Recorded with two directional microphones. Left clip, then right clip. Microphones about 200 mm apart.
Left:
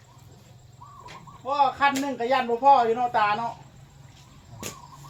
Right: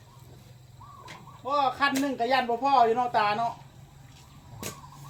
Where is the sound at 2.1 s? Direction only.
45° right (ahead or behind).